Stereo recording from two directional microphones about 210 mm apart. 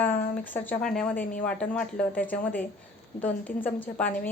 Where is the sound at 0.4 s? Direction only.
10° left (ahead or behind).